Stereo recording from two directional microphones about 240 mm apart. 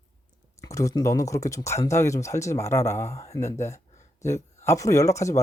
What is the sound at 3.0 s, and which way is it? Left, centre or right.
Speech, left.